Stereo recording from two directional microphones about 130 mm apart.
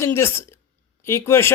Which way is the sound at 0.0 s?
20° left (ahead or behind).